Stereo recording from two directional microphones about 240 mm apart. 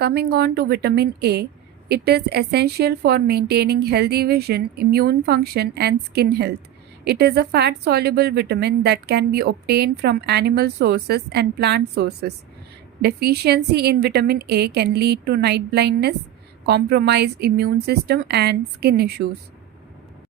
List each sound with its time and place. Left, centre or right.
0.0 s a woman's voice: right